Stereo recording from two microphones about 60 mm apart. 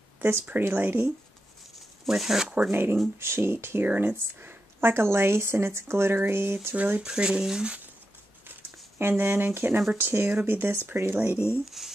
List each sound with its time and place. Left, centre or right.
0.5 s speech: right
2.0 s speech: centre
2.7 s speech: right
3.8 s speech: right
6.7 s speech: right
7.0 s speech: centre
8.9 s speech: right
11.4 s speech: left